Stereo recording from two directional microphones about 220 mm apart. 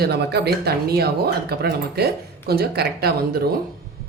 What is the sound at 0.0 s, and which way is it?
Speech, 45° right (ahead or behind).